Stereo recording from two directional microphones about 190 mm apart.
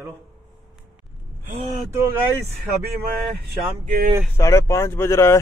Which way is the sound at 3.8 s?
45° right (ahead or behind).